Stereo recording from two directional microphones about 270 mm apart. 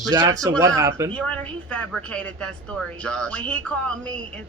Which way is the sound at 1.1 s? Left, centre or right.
Centre.